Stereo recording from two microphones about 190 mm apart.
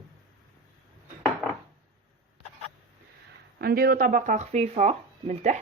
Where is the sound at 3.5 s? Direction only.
50° right (ahead or behind).